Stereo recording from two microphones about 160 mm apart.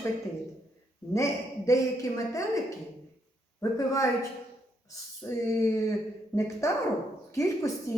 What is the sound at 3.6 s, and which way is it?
Speech, 20° left (ahead or behind).